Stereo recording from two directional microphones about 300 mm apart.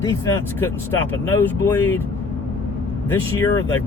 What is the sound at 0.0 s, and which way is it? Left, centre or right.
Speech, centre.